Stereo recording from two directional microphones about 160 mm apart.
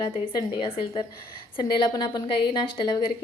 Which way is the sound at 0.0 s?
25° left (ahead or behind).